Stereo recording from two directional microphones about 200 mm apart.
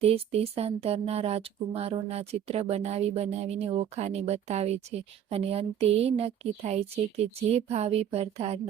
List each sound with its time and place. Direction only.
0.0 s speech: 30° right (ahead or behind)